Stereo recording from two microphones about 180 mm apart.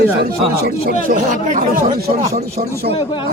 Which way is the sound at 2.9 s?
30° left (ahead or behind).